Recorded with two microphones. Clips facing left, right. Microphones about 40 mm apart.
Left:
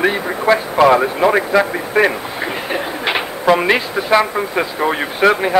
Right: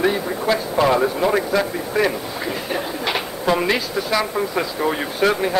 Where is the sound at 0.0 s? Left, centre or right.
Left.